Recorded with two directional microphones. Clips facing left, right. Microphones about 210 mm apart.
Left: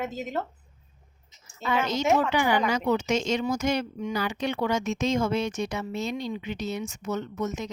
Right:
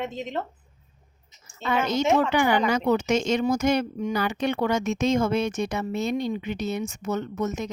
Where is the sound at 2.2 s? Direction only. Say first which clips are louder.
Right 2 dB; 55° right (ahead or behind).